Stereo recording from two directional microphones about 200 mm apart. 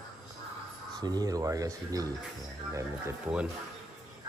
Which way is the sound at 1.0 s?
20° right (ahead or behind).